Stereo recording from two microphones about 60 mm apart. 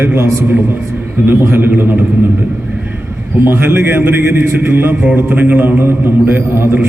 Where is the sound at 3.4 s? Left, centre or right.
Right.